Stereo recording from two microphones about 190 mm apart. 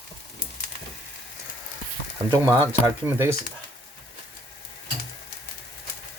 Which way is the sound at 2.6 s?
15° right (ahead or behind).